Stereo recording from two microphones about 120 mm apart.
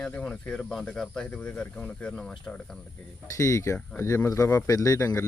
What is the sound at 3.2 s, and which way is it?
A man's voice, 25° left (ahead or behind).